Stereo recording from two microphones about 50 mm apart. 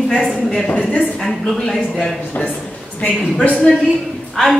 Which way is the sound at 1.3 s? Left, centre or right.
Centre.